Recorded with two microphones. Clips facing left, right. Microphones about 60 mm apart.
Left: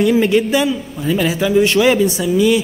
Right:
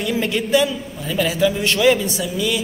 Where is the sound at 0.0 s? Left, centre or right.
Centre.